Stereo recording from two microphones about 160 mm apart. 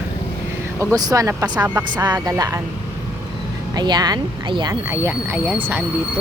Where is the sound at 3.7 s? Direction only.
25° right (ahead or behind).